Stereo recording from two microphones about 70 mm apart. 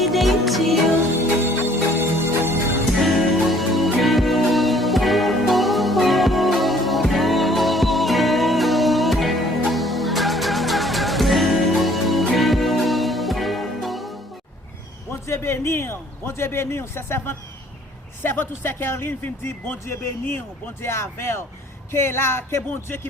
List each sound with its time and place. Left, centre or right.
0.0 s music: centre
2.0 s music: right
3.0 s music: centre
15.1 s a sound: left
18.2 s speech: left